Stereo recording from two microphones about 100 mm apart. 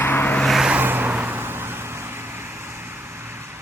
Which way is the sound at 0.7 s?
20° right (ahead or behind).